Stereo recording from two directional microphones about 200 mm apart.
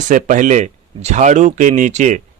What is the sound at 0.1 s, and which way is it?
Speech, 40° right (ahead or behind).